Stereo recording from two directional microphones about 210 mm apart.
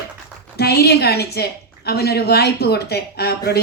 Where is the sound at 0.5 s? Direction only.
50° left (ahead or behind).